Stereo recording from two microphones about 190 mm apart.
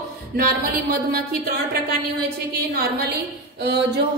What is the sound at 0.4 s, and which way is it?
Speech, 50° right (ahead or behind).